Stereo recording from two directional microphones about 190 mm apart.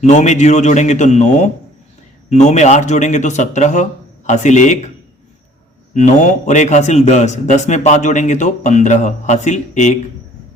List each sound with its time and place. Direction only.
0.0 s a man's voice: 40° left (ahead or behind)
5.9 s a man's voice: 40° left (ahead or behind)